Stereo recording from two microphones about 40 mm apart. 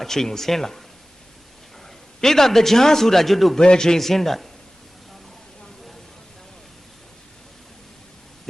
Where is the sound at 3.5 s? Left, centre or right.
Centre.